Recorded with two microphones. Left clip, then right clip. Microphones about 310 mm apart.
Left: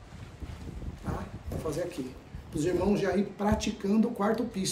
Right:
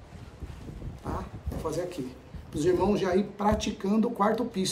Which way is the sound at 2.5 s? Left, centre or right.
Centre.